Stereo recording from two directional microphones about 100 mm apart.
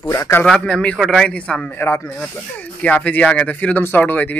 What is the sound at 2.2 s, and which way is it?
Speech, 15° left (ahead or behind).